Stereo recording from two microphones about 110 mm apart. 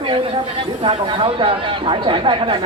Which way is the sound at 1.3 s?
50° right (ahead or behind).